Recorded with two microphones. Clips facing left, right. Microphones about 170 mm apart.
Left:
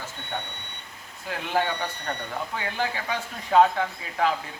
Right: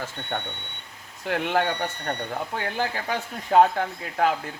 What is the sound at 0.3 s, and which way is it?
Speech, 60° right (ahead or behind).